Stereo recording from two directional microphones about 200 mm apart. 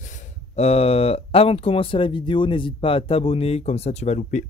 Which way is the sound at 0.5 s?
30° left (ahead or behind).